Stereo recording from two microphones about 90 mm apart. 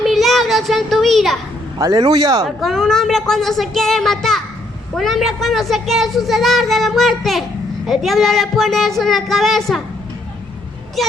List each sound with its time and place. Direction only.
0.0 s child singing: centre (ahead or behind)
1.8 s speech: 45° right (ahead or behind)
2.4 s a woman's voice: centre (ahead or behind)